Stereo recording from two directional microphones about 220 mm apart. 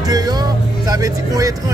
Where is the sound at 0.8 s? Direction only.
15° right (ahead or behind).